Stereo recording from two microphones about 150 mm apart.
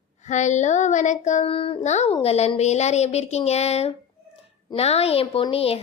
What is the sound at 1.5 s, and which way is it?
A woman's voice, 40° left (ahead or behind).